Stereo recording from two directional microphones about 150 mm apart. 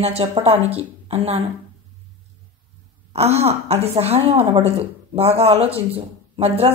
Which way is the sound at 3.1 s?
45° right (ahead or behind).